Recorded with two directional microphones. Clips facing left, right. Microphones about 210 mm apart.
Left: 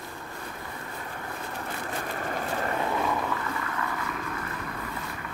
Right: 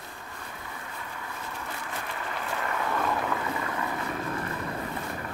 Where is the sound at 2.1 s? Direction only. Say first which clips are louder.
Left 3 dB; 45° left (ahead or behind).